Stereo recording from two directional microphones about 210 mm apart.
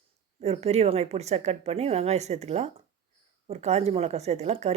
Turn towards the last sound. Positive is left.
turn(degrees=-30)  # may be behind; listen again after turning